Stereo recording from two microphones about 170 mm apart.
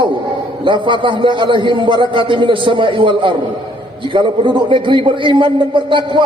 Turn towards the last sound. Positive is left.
turn(degrees=-30)  # may be behind; listen again after turning